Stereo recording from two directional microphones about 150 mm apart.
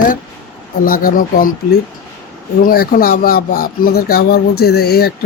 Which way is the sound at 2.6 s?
75° left (ahead or behind).